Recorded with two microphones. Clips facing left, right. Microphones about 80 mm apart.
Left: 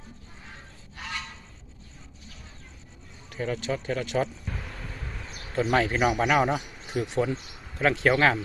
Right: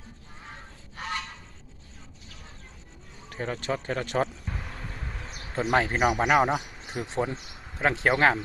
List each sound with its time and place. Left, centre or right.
3.2 s speech: right
4.4 s speech: centre